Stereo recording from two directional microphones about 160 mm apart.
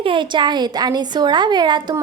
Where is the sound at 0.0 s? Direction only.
30° right (ahead or behind).